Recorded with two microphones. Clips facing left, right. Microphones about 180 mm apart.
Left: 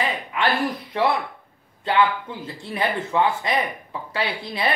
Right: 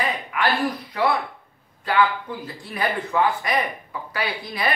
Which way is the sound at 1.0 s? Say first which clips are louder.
Left 1 dB; 25° left (ahead or behind).